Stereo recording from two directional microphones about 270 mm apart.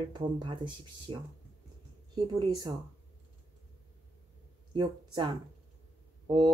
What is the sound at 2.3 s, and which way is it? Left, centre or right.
Speech, centre.